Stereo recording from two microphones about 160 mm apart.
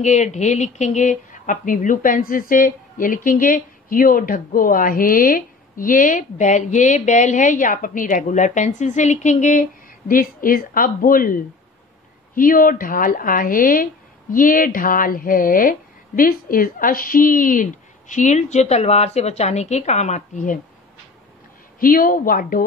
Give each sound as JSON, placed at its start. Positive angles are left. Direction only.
{"t": 0.0, "sound": "a woman's voice", "side_deg": 45}
{"t": 21.7, "sound": "speech", "side_deg": 60}